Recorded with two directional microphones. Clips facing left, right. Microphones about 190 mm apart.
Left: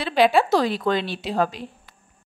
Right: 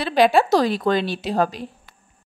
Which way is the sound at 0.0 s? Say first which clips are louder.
Right 2 dB; 40° right (ahead or behind).